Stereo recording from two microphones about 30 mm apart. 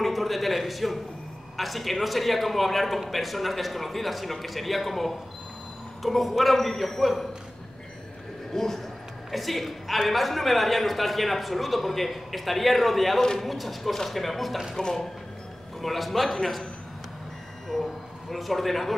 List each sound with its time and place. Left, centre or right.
0.0 s a sound: centre
1.6 s a man's voice: centre
8.5 s speech: centre
9.3 s a man's voice: centre
14.8 s speech: centre
15.8 s a man's voice: centre
18.3 s a man's voice: centre